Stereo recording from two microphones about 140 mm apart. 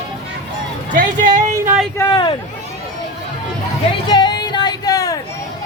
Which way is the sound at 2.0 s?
30° left (ahead or behind).